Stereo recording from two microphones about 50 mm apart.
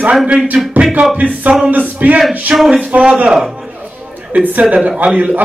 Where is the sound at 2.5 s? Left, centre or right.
Centre.